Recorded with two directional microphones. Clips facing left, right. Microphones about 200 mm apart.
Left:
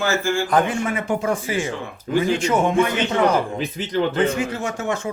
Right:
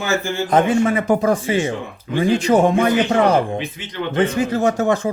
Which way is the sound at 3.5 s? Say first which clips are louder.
Left 1 dB; 40° left (ahead or behind).